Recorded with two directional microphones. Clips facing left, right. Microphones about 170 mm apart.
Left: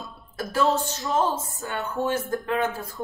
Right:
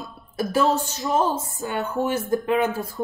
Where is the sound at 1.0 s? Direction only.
20° right (ahead or behind).